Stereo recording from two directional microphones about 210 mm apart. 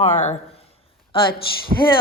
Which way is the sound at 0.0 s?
35° left (ahead or behind).